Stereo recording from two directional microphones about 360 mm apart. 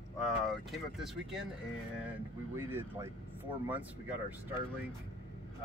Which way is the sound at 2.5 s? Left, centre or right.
Centre.